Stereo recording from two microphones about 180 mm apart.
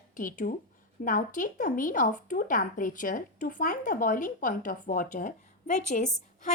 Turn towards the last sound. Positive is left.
turn(degrees=40)  # may be behind; listen again after turning